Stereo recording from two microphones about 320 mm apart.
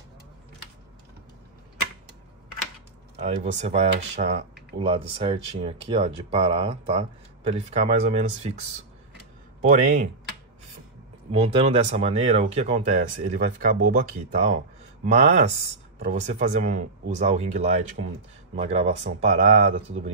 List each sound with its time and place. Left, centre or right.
3.2 s speech: centre
9.6 s speech: right
11.3 s speech: centre
15.0 s speech: centre